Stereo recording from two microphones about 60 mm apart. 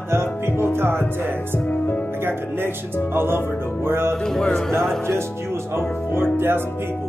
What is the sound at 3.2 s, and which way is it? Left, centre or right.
Music, right.